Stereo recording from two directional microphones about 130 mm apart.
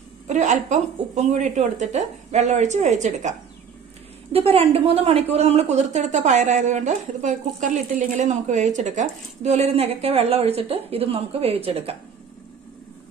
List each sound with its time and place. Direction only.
0.3 s a woman's voice: 70° right (ahead or behind)
4.3 s speech: 50° right (ahead or behind)